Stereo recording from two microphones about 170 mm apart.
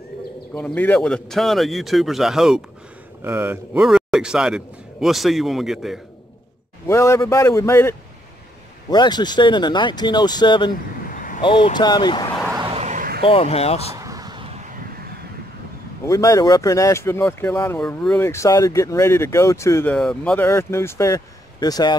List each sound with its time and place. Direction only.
0.6 s a man's voice: 10° left (ahead or behind)
6.9 s speech: 15° left (ahead or behind)
8.9 s speech: 25° left (ahead or behind)
10.7 s vehicle: 55° left (ahead or behind)
11.4 s speech: 30° left (ahead or behind)
12.5 s a sound: 30° right (ahead or behind)
12.8 s a sound: 50° right (ahead or behind)
13.2 s speech: 35° left (ahead or behind)
13.9 s a sound: 20° right (ahead or behind)
16.1 s speech: 20° left (ahead or behind)
19.9 s a man's voice: 5° left (ahead or behind)
20.4 s speech: 15° left (ahead or behind)